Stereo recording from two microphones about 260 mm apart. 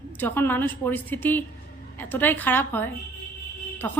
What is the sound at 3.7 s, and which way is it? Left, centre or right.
Music, centre.